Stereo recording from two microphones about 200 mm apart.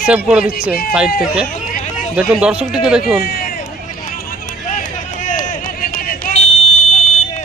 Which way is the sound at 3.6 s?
40° left (ahead or behind).